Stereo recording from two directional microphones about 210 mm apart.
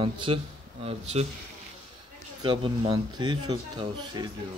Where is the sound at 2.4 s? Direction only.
20° right (ahead or behind).